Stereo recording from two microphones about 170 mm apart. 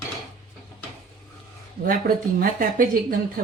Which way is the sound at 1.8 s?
60° right (ahead or behind).